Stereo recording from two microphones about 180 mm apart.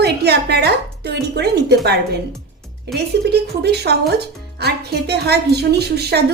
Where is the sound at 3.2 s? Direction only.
65° right (ahead or behind).